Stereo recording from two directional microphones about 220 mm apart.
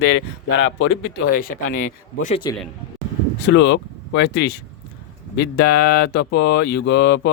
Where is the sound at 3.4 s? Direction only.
55° left (ahead or behind).